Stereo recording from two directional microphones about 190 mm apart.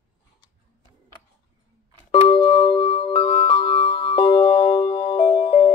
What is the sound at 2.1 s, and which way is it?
Music, 30° left (ahead or behind).